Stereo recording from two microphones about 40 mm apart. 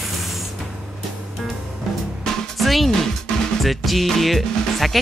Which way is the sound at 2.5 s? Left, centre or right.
Centre.